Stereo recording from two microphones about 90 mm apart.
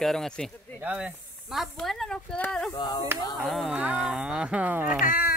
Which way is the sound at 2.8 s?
55° left (ahead or behind).